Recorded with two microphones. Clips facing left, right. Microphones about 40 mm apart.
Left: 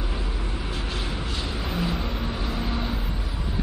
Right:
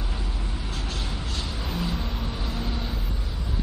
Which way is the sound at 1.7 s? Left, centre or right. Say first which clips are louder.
Left 2 dB; centre.